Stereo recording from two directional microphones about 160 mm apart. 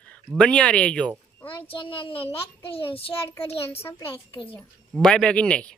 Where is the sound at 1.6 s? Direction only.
35° left (ahead or behind).